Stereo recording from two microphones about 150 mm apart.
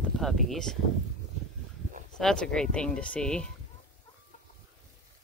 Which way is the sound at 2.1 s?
5° left (ahead or behind).